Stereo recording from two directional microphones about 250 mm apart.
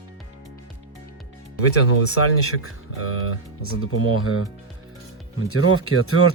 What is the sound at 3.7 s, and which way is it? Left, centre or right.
Speech, left.